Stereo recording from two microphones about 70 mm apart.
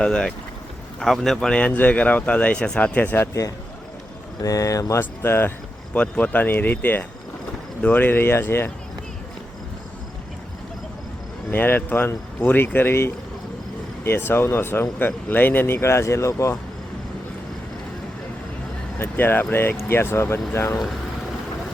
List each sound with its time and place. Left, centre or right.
0.0 s speech: centre
4.4 s speech: left
4.9 s speech: left
5.9 s speech: left
11.5 s speech: left
18.9 s speech: left